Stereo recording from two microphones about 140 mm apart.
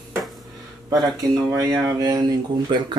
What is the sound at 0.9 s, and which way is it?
Speech, 30° right (ahead or behind).